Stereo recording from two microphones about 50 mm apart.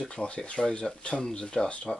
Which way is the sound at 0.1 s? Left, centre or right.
Left.